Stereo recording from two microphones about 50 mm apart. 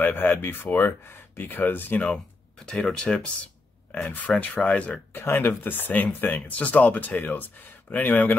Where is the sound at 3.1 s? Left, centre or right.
Centre.